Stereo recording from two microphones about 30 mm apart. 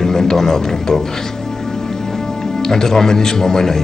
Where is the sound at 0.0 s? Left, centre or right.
Centre.